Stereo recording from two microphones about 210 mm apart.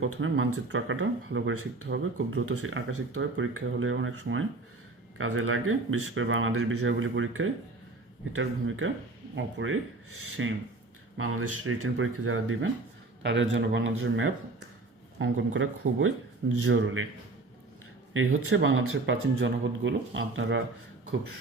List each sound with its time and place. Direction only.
0.0 s speech: 75° right (ahead or behind)
11.2 s speech: 90° right
13.2 s speech: 60° right (ahead or behind); by 17.1 s 80° right
18.4 s speech: 70° right (ahead or behind)